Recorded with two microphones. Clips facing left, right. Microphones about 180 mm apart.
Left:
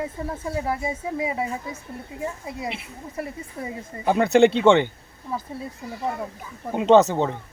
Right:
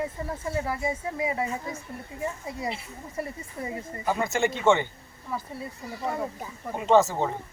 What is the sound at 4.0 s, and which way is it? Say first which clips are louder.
Speech: left 10 dB; 70° left (ahead or behind).